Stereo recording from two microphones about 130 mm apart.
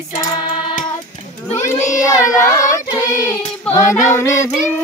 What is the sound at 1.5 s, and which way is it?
Crowd, 65° left (ahead or behind).